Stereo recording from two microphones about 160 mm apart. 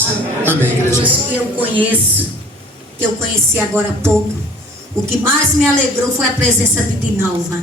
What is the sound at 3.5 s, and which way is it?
Speech, 15° right (ahead or behind).